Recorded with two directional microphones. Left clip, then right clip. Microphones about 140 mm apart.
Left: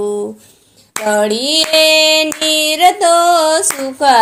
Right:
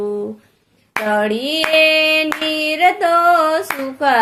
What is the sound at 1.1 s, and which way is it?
Female singing, 35° left (ahead or behind).